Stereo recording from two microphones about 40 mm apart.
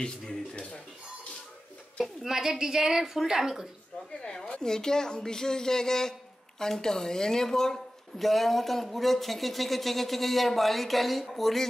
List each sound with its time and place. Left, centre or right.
0.0 s speech: left
2.2 s a woman's voice: centre
4.2 s a woman's voice: left; by 11.6 s centre